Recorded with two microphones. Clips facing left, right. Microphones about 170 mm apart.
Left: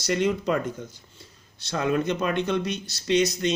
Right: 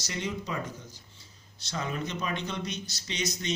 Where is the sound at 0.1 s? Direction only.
60° left (ahead or behind).